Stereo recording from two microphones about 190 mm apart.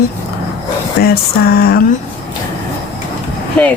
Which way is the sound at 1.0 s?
55° left (ahead or behind).